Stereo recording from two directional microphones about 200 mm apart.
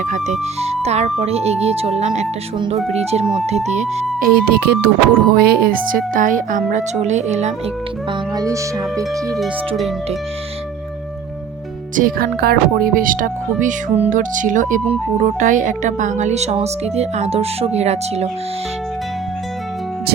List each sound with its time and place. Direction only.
0.0 s speech: 35° right (ahead or behind)
4.2 s speech: 50° right (ahead or behind); by 7.5 s 35° right (ahead or behind)
8.4 s speech: 15° right (ahead or behind)
9.4 s speech: centre (ahead or behind)
11.9 s speech: 45° right (ahead or behind)